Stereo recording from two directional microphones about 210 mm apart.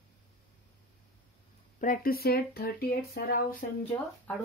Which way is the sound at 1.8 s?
40° left (ahead or behind).